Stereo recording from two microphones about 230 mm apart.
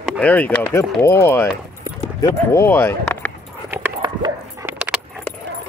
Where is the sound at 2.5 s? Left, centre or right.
Centre.